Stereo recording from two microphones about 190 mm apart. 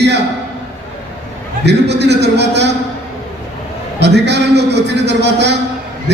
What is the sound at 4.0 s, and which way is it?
A man's voice, 65° right (ahead or behind).